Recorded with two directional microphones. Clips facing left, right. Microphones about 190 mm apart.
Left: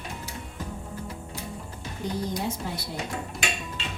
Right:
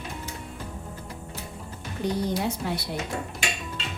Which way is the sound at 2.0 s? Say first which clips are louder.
Right 4 dB; 70° right (ahead or behind).